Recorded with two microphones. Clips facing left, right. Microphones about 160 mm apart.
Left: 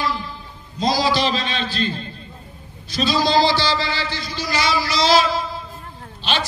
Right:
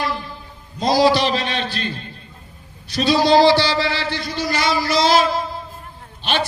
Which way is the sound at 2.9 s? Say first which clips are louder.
Right 4 dB; 65° right (ahead or behind).